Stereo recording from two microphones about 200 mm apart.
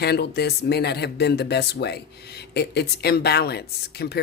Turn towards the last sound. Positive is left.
turn(degrees=55)  # may be behind; listen again after turning